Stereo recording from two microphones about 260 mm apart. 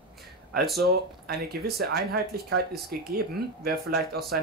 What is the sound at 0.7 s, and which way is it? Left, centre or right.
Speech, right.